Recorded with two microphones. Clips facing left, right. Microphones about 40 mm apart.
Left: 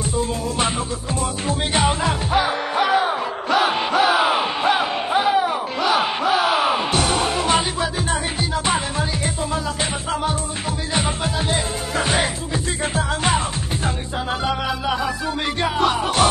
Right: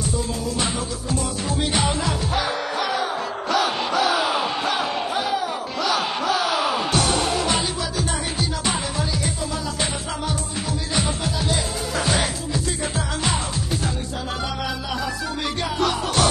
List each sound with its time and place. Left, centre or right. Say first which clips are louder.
1.5 s music: left 3 dB; left
2.3 s music: left 7 dB; left
11.0 s music: left 2 dB; left
15.6 s music: left 4 dB; left